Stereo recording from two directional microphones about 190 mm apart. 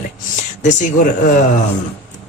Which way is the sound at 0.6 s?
40° left (ahead or behind).